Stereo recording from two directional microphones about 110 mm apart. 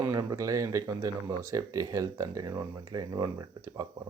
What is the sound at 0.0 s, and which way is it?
Speech, 35° right (ahead or behind).